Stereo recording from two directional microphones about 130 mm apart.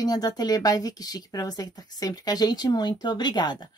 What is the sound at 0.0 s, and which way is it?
Speech, 30° left (ahead or behind).